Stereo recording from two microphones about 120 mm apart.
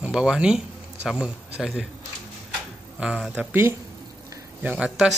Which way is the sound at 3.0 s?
5° right (ahead or behind).